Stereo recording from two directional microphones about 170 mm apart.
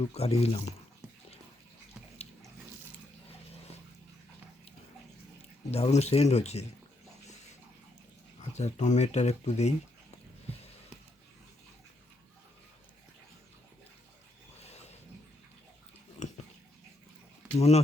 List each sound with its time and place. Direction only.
0.1 s speech: 35° left (ahead or behind)
5.7 s speech: 40° left (ahead or behind)
8.4 s speech: 40° left (ahead or behind)
14.6 s a sound: 40° left (ahead or behind)
16.2 s a sound: 40° left (ahead or behind)
17.6 s speech: 40° left (ahead or behind)